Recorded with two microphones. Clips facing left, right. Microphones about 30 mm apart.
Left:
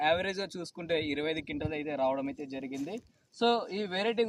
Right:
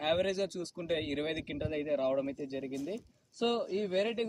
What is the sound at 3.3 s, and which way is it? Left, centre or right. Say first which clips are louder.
Speech: left 3 dB; left.